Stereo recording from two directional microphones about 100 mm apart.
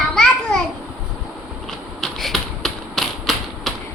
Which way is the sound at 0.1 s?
5° left (ahead or behind).